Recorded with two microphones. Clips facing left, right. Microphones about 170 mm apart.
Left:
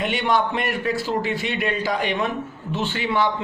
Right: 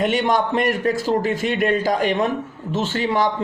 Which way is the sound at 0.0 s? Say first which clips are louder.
Right 3 dB; 45° right (ahead or behind).